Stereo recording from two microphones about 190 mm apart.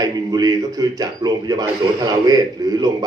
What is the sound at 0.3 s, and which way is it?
A man's voice, 20° right (ahead or behind).